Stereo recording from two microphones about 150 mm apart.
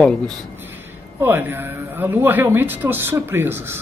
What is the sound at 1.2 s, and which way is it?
Speech, 15° right (ahead or behind).